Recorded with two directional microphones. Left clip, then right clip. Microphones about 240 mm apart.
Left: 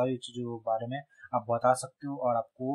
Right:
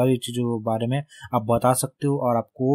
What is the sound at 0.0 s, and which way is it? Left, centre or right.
Speech, right.